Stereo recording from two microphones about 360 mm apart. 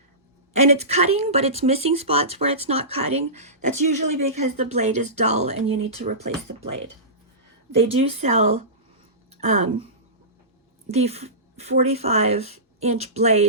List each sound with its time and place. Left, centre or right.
0.5 s speech: centre
7.9 s speech: centre
10.9 s speech: centre